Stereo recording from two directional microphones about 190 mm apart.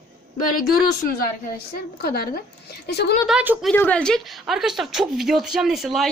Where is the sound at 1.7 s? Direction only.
50° left (ahead or behind).